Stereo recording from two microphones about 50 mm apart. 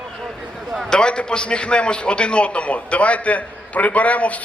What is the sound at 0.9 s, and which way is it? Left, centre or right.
A man's voice, centre.